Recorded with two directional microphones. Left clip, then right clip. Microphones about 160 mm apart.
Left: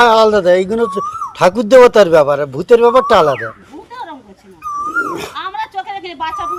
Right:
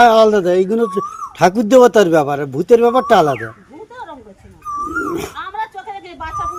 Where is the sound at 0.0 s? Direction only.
70° right (ahead or behind).